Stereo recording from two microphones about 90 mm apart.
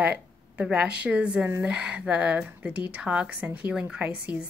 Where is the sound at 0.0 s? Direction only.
15° right (ahead or behind).